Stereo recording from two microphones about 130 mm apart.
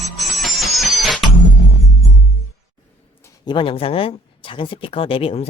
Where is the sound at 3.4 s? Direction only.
40° left (ahead or behind).